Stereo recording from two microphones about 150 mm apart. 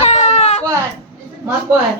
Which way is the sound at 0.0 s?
50° left (ahead or behind).